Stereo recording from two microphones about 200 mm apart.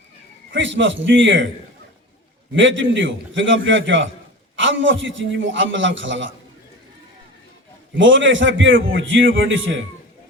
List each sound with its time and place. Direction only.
0.5 s a man's voice: 70° right (ahead or behind)
2.6 s a man's voice: 70° right (ahead or behind)
7.9 s a man's voice: 70° right (ahead or behind)